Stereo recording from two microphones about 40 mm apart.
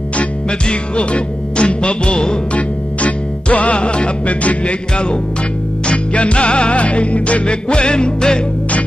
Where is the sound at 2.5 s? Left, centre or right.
Left.